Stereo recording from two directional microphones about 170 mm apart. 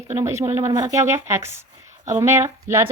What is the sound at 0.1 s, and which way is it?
Speech, 15° right (ahead or behind).